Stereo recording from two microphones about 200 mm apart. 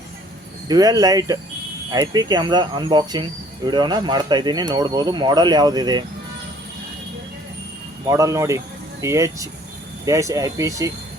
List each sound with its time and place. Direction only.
0.7 s speech: 20° right (ahead or behind)
8.0 s speech: 15° right (ahead or behind)